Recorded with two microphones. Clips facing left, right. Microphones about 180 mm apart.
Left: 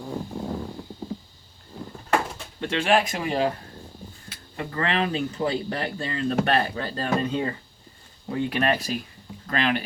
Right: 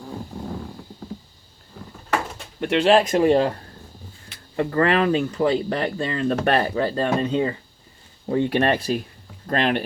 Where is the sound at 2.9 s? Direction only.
40° right (ahead or behind).